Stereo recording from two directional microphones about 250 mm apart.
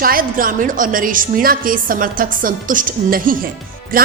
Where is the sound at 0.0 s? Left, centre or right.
Right.